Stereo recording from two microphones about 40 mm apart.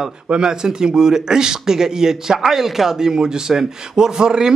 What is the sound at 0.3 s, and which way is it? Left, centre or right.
A man's voice, centre.